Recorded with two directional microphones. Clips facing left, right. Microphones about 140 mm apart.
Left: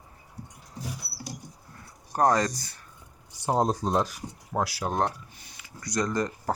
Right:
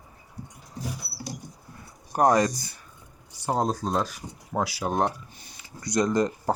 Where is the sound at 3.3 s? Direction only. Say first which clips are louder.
Left 1 dB; 20° left (ahead or behind).